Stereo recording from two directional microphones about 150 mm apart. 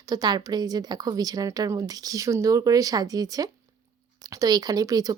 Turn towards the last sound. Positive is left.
turn(degrees=-25)  # may be behind; listen again after turning